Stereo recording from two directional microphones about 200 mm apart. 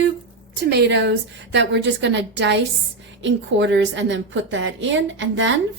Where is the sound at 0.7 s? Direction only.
55° right (ahead or behind).